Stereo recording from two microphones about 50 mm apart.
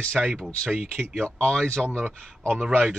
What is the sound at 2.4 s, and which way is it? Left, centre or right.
Speech, right.